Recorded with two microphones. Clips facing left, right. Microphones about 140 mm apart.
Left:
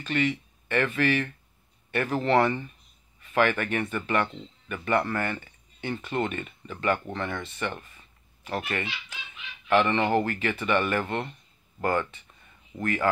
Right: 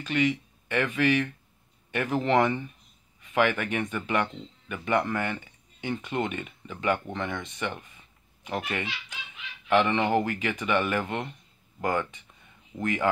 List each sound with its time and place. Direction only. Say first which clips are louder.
0.0 s speech: right 1 dB; 10° right (ahead or behind)